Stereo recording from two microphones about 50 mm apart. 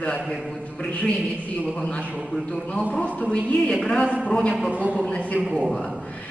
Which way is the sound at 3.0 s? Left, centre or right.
Left.